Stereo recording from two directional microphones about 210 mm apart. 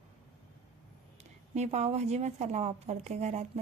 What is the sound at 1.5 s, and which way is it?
A woman's voice, 30° right (ahead or behind).